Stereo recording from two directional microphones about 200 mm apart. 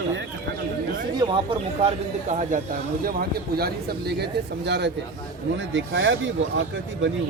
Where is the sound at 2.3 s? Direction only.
35° right (ahead or behind).